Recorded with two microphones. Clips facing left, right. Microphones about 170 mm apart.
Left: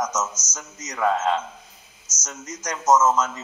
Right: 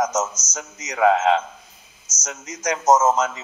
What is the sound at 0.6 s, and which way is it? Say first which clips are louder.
A man's voice: right 6 dB; 85° right.